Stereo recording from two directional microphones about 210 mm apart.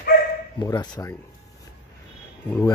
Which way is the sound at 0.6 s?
20° left (ahead or behind).